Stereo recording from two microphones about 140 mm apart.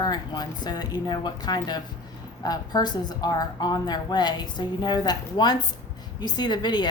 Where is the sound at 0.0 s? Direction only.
30° left (ahead or behind).